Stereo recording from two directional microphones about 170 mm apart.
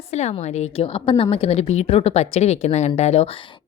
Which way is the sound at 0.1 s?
40° left (ahead or behind).